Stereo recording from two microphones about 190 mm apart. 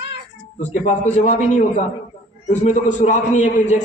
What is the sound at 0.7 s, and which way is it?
A man's voice, 40° left (ahead or behind).